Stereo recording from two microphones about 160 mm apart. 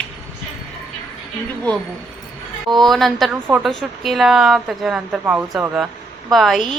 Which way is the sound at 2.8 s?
Centre (ahead or behind).